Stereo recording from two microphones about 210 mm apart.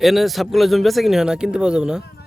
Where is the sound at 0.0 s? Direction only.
Centre (ahead or behind).